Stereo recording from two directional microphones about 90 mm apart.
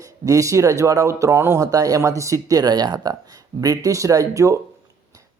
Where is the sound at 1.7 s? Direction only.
40° right (ahead or behind).